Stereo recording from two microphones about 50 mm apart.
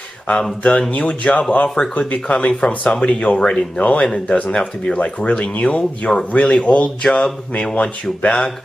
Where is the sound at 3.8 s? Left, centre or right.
Left.